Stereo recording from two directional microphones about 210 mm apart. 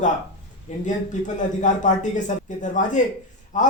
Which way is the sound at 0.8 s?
35° left (ahead or behind).